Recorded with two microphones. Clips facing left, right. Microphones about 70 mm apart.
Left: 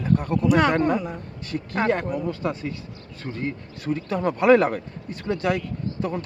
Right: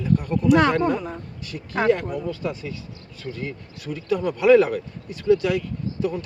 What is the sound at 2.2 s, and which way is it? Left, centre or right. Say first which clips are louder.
Speech: left 1 dB; left.